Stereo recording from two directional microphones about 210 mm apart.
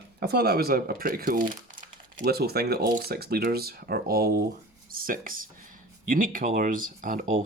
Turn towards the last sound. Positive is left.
turn(degrees=-40)  # may be behind; listen again after turning